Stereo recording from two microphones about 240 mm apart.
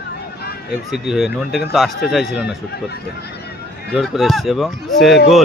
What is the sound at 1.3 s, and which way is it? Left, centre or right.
Speech, left.